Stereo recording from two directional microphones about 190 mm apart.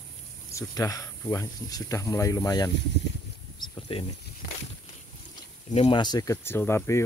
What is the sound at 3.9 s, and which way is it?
Speech, 30° left (ahead or behind).